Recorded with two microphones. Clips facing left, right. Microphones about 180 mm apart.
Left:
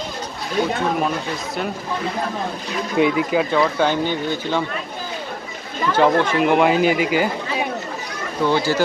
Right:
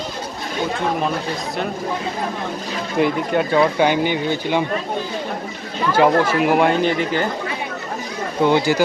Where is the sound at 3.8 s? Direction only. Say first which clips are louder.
Right 2 dB; 15° right (ahead or behind).